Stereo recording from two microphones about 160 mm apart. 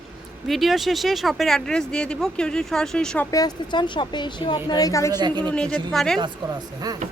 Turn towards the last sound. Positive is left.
turn(degrees=5)  # may be behind; listen again after turning